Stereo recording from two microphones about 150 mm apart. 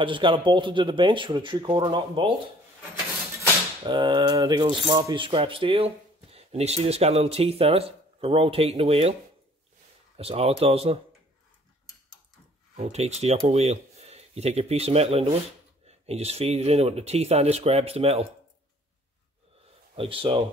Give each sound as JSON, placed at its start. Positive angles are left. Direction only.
{"t": 0.0, "sound": "speech", "side_deg": -35}
{"t": 3.8, "sound": "speech", "side_deg": -30}
{"t": 10.1, "sound": "speech", "side_deg": -40}
{"t": 12.7, "sound": "speech", "side_deg": -45}
{"t": 20.0, "sound": "speech", "side_deg": -35}